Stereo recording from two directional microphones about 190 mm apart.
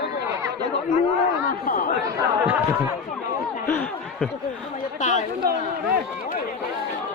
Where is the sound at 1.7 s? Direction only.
45° left (ahead or behind).